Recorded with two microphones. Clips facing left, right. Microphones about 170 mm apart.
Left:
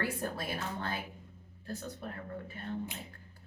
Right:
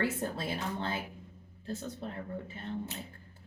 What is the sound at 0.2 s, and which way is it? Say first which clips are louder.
Speech: right 2 dB; 25° right (ahead or behind).